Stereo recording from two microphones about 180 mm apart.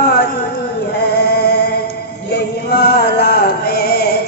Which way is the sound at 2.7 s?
60° left (ahead or behind).